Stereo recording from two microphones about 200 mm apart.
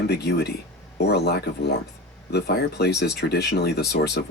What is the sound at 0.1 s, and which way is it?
Speech, 55° left (ahead or behind).